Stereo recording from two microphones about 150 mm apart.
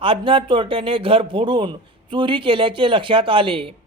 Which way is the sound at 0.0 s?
35° right (ahead or behind).